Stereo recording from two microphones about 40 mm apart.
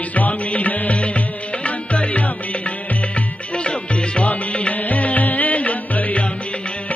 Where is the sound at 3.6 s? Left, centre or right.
Left.